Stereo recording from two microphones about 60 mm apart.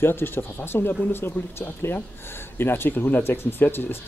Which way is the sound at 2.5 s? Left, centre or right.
Left.